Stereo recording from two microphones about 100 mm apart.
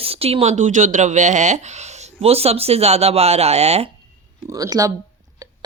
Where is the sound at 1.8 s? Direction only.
90° right.